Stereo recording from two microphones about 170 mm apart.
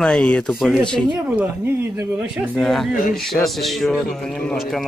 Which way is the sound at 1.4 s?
15° right (ahead or behind).